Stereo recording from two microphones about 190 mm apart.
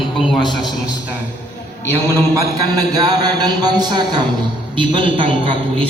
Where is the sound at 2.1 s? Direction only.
15° right (ahead or behind).